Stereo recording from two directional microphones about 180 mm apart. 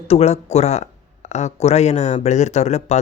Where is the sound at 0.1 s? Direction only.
35° left (ahead or behind).